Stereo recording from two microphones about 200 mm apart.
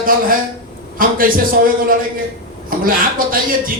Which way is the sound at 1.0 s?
45° right (ahead or behind).